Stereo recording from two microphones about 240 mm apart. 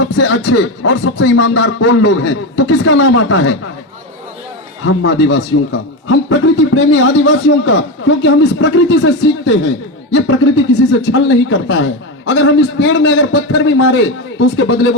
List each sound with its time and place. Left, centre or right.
0.0 s speech: left
1.2 s a man's voice: left
4.9 s a man's voice: left